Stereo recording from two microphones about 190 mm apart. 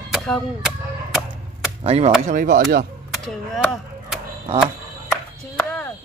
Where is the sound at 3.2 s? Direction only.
Centre (ahead or behind).